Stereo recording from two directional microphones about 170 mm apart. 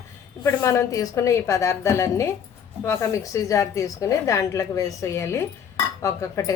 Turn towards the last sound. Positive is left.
turn(degrees=20)  # may be behind; listen again after turning